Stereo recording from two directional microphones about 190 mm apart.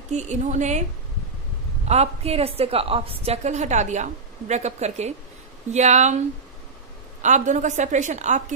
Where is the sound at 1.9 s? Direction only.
35° right (ahead or behind).